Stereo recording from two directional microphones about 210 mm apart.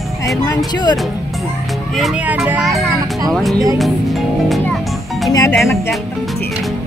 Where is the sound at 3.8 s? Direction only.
Centre (ahead or behind).